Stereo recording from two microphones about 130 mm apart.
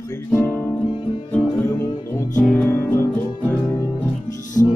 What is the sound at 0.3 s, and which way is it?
Music, 15° left (ahead or behind).